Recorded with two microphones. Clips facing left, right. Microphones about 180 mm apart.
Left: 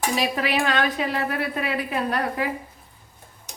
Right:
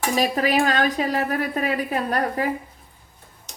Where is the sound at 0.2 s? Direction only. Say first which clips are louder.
Right 4 dB; 45° right (ahead or behind).